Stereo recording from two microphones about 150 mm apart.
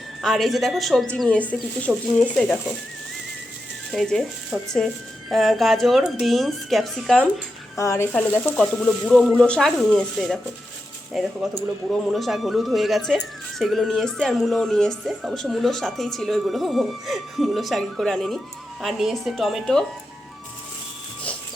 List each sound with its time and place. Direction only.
0.2 s speech: centre (ahead or behind)
3.9 s speech: centre (ahead or behind)
4.5 s speech: 10° right (ahead or behind)
7.8 s speech: 20° left (ahead or behind); by 19.8 s centre (ahead or behind)